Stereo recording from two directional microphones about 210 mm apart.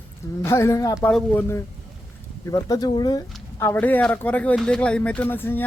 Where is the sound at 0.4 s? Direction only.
15° left (ahead or behind).